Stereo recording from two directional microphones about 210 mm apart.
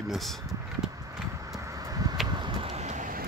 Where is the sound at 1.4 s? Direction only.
15° right (ahead or behind); by 3.2 s 40° right (ahead or behind).